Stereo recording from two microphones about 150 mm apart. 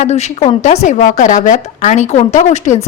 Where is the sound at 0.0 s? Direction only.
50° left (ahead or behind).